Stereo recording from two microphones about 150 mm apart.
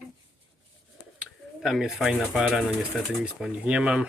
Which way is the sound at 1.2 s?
Centre (ahead or behind).